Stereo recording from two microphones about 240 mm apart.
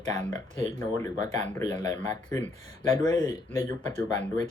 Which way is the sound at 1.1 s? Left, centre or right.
Right.